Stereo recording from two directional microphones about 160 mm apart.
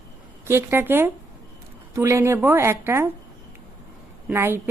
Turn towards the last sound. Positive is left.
turn(degrees=-15)  # may be behind; listen again after turning